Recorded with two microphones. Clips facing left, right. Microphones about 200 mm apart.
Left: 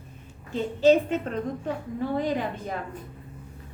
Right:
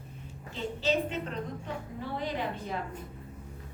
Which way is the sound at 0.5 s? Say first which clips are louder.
Left 11 dB; 50° left (ahead or behind).